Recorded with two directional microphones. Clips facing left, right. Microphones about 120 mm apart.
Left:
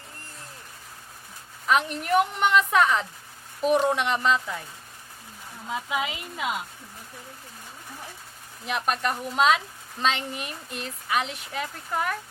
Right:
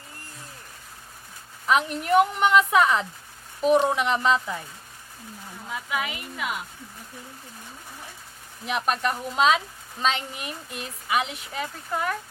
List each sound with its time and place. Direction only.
1.6 s speech: centre (ahead or behind)
5.6 s speech: 20° left (ahead or behind)
8.6 s speech: centre (ahead or behind)